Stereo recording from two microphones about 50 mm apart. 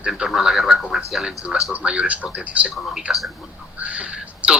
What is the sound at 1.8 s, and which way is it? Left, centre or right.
Speech, centre.